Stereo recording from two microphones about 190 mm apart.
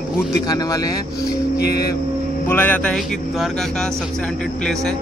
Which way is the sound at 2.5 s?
10° left (ahead or behind).